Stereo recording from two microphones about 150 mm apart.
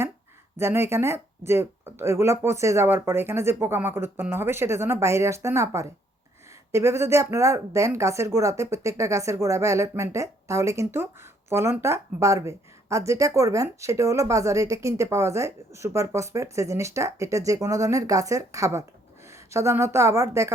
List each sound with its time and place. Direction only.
0.5 s a woman's voice: 15° right (ahead or behind)